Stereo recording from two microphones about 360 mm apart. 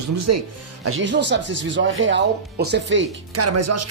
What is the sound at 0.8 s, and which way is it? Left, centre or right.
Speech, right.